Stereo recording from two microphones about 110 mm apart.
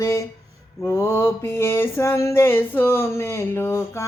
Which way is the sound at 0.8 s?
20° left (ahead or behind).